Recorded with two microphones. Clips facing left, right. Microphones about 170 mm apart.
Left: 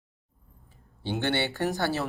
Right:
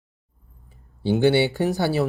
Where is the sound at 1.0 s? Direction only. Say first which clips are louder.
Right 10 dB; 10° right (ahead or behind).